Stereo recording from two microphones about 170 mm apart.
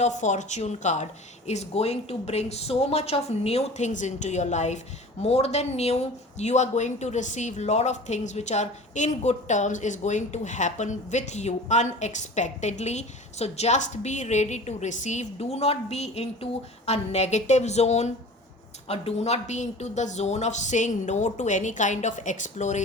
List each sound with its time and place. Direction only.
0.0 s a woman's voice: 45° left (ahead or behind)